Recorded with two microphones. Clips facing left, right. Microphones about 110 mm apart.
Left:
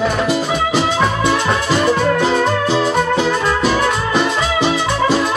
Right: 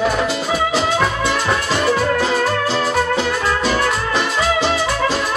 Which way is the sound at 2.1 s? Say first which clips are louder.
Left 2 dB; centre (ahead or behind).